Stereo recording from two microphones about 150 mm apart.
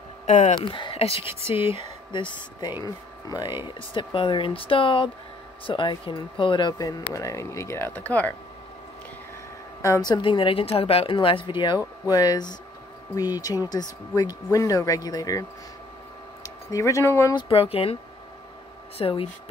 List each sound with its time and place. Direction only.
0.3 s speech: 50° left (ahead or behind)
0.7 s a woman's voice: 35° left (ahead or behind); by 8.4 s 10° left (ahead or behind)
9.8 s a woman's voice: 20° left (ahead or behind)
16.4 s speech: 20° left (ahead or behind)
17.4 s a woman's voice: 40° left (ahead or behind)
18.9 s a woman's voice: 40° left (ahead or behind)